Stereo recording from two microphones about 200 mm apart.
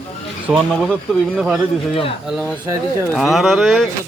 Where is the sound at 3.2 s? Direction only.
Centre (ahead or behind).